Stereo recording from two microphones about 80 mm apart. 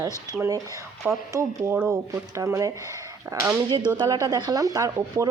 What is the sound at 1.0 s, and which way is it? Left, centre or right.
Speech, right.